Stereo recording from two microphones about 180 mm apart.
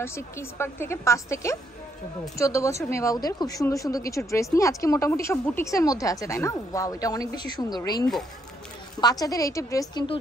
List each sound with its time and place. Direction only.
0.0 s a woman's voice: 15° left (ahead or behind)